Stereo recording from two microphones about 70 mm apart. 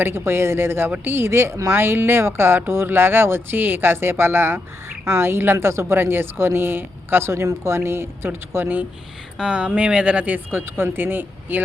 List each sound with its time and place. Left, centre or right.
0.0 s speech: right
8.6 s speech: right